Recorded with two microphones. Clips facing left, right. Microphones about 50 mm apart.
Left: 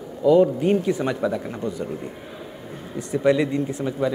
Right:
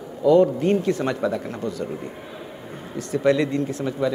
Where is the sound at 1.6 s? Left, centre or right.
Centre.